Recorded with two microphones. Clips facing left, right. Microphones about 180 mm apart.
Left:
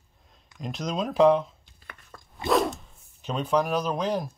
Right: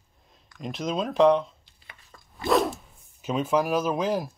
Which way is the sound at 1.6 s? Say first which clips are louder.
Left 5 dB; 50° left (ahead or behind).